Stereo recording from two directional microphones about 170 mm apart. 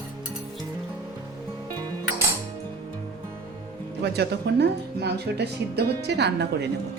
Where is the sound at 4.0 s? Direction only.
75° right (ahead or behind).